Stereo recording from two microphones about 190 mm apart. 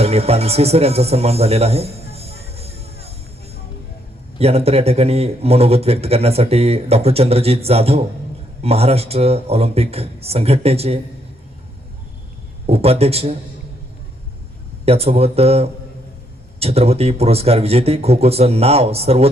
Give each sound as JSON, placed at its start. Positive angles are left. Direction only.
{"t": 0.0, "sound": "music", "side_deg": -35}
{"t": 4.4, "sound": "a man's voice", "side_deg": -30}
{"t": 12.6, "sound": "a man's voice", "side_deg": -30}
{"t": 14.8, "sound": "a man's voice", "side_deg": -30}